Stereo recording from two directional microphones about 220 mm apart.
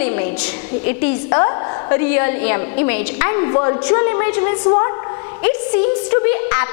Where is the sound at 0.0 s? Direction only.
15° left (ahead or behind).